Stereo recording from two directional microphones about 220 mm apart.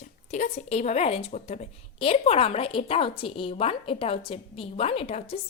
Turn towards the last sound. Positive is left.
turn(degrees=25)  # may be behind; listen again after turning